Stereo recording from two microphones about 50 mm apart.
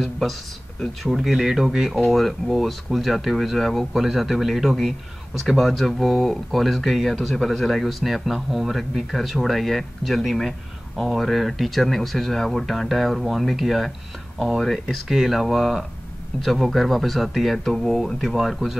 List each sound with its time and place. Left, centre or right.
1.0 s speech: centre
4.0 s speech: centre